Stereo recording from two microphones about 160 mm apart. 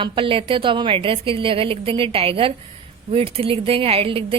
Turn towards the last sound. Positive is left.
turn(degrees=-35)  # may be behind; listen again after turning